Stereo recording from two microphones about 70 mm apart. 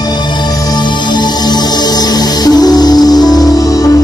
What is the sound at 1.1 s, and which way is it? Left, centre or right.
Music, left.